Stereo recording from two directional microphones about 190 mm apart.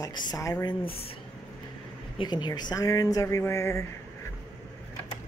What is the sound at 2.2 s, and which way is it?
Speech, 25° left (ahead or behind).